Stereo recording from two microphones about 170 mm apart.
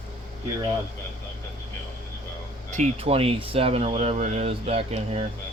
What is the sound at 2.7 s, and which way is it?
Speech, 40° right (ahead or behind).